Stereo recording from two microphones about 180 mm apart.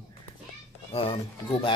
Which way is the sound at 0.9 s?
30° left (ahead or behind).